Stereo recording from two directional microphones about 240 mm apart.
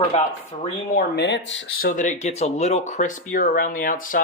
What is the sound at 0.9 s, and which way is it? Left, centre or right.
Speech, left.